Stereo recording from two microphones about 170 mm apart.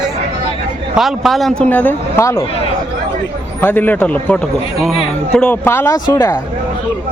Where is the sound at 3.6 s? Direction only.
10° left (ahead or behind).